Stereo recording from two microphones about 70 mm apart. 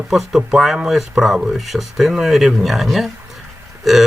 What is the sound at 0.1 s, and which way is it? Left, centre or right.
Speech, centre.